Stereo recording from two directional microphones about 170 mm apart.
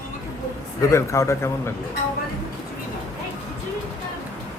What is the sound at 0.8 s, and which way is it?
Speech, 20° left (ahead or behind).